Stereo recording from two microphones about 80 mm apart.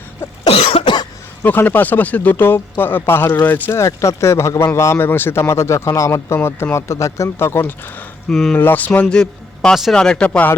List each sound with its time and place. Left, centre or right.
0.5 s cough: left
1.5 s speech: left
3.7 s speech: left
8.3 s speech: centre
8.5 s speech: left
9.0 s a man's voice: centre